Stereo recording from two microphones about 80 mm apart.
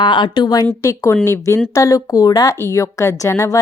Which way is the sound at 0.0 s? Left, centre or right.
Left.